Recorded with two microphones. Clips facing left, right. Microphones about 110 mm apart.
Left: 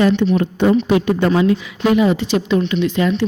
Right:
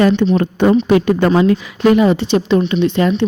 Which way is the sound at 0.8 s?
55° right (ahead or behind).